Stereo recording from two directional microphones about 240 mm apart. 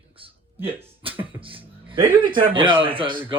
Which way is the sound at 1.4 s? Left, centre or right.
Right.